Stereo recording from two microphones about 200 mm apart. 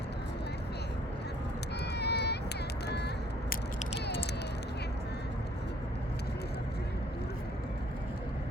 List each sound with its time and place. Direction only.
2.0 s run: 55° left (ahead or behind)